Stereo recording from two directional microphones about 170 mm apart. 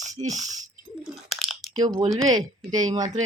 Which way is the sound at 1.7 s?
25° right (ahead or behind).